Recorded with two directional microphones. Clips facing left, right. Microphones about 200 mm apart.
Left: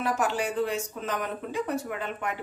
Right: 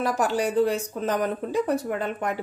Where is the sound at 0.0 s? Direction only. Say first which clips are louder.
Right 4 dB; 40° right (ahead or behind).